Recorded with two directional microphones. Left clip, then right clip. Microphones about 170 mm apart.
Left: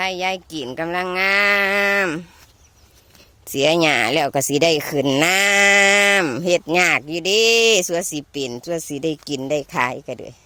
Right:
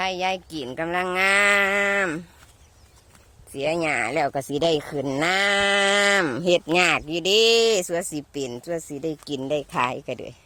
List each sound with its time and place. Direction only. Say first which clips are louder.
0.0 s speech: left 3 dB; 25° left (ahead or behind)
3.5 s speech: left 8 dB; 70° left (ahead or behind); by 7.6 s 15° left (ahead or behind)
7.6 s speech: left 5 dB; 30° left (ahead or behind)
9.3 s speech: left 1 dB; 20° left (ahead or behind)
9.9 s speech: left 2 dB; 5° left (ahead or behind)